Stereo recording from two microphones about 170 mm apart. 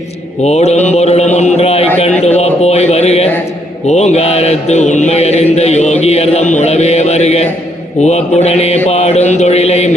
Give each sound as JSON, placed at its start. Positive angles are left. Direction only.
{"t": 0.4, "sound": "speech", "side_deg": 40}
{"t": 2.0, "sound": "mantra", "side_deg": 40}